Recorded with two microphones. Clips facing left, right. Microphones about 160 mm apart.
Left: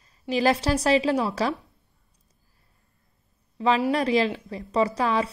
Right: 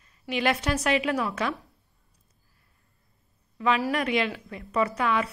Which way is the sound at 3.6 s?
30° left (ahead or behind).